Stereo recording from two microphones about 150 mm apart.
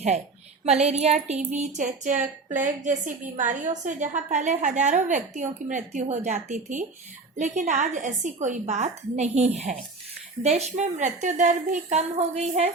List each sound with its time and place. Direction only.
0.6 s a woman's voice: 45° right (ahead or behind)